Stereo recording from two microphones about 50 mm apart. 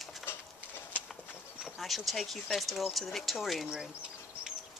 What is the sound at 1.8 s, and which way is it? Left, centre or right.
Speech, centre.